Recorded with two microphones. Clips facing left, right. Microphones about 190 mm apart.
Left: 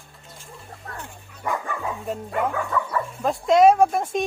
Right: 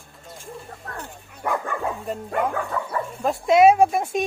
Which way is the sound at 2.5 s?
35° right (ahead or behind).